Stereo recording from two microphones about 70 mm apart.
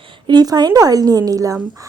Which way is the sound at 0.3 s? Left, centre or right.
Right.